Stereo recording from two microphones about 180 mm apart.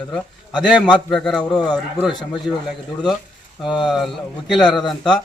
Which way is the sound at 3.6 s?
25° left (ahead or behind).